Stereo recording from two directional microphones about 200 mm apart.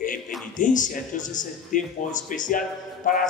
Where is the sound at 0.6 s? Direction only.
40° left (ahead or behind).